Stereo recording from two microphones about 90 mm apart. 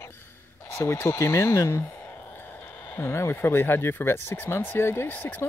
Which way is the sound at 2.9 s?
30° left (ahead or behind).